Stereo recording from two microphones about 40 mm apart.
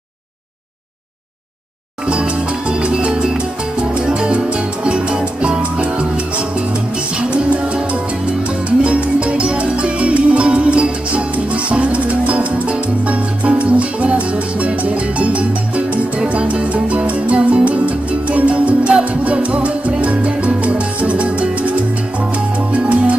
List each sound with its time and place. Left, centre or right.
2.0 s music: right
22.7 s salsa music: right